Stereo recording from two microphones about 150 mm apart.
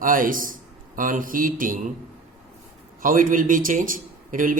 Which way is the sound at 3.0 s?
65° right (ahead or behind).